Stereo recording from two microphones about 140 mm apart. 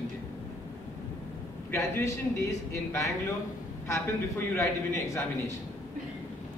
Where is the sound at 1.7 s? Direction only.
20° left (ahead or behind).